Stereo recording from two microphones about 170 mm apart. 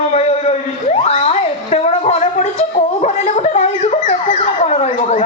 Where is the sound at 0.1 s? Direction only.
40° left (ahead or behind).